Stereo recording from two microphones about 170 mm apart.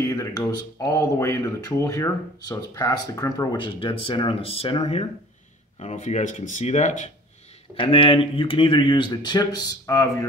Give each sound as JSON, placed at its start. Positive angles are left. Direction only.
{"t": 0.1, "sound": "speech", "side_deg": 20}
{"t": 7.7, "sound": "speech", "side_deg": 30}